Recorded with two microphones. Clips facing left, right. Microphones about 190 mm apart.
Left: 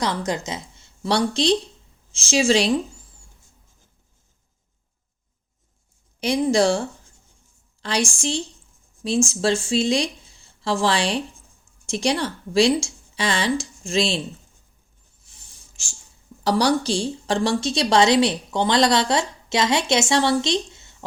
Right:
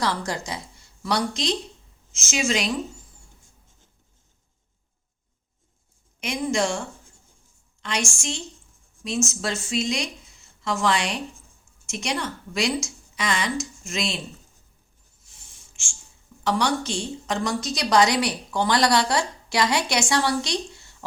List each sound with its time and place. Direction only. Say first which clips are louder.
0.0 s a woman's voice: left 2 dB; 20° left (ahead or behind)
6.1 s a woman's voice: left 6 dB; 35° left (ahead or behind)
15.7 s writing: left 2 dB; 40° left (ahead or behind)
16.4 s a woman's voice: left 4 dB; 35° left (ahead or behind)